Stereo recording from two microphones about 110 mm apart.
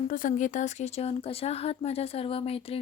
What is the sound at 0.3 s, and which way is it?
Speech, 90° left.